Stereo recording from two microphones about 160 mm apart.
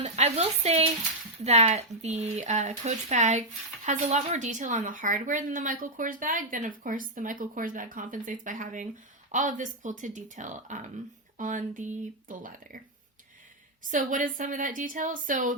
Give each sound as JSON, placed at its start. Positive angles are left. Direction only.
{"t": 0.0, "sound": "a woman's voice", "side_deg": -45}
{"t": 13.9, "sound": "a woman's voice", "side_deg": -55}